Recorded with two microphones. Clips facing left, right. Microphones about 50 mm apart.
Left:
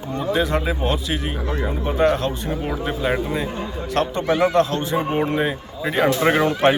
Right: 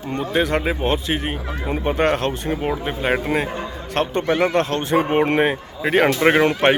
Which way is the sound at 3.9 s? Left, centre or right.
Right.